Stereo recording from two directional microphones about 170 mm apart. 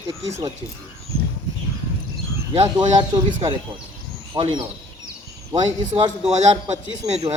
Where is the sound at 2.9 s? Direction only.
30° right (ahead or behind).